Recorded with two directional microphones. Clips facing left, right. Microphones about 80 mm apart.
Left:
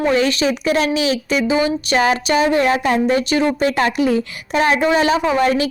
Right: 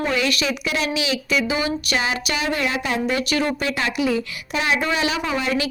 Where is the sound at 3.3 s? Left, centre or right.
Left.